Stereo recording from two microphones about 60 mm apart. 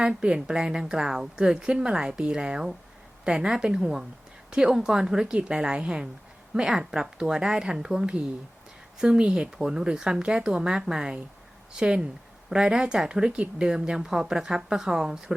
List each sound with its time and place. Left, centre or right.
0.0 s a woman's voice: centre